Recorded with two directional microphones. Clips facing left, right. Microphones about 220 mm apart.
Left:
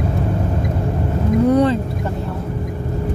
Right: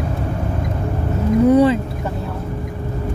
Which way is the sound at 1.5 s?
5° right (ahead or behind).